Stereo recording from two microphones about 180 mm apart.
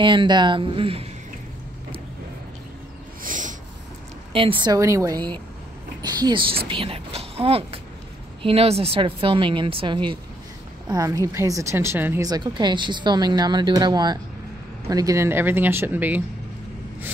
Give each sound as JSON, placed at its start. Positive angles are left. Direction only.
{"t": 0.0, "sound": "a woman's voice", "side_deg": -25}
{"t": 3.3, "sound": "snort", "side_deg": -45}
{"t": 4.3, "sound": "a woman's voice", "side_deg": -30}